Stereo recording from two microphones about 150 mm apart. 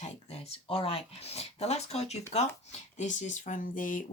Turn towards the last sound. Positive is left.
turn(degrees=65)  # may be behind; listen again after turning